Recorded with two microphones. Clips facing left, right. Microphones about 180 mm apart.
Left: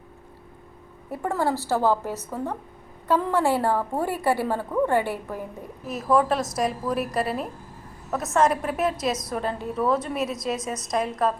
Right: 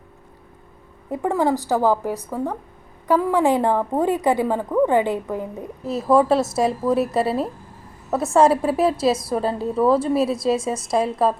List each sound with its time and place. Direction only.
1.1 s a woman's voice: 15° right (ahead or behind)